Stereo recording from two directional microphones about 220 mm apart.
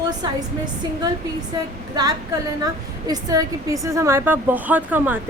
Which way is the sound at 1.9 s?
15° right (ahead or behind).